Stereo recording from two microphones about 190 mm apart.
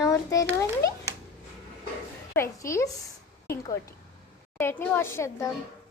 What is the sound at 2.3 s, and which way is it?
Speech, 15° left (ahead or behind).